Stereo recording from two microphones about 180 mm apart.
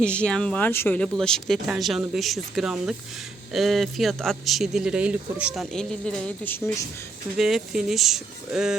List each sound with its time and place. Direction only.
0.0 s a man's voice: 5° left (ahead or behind)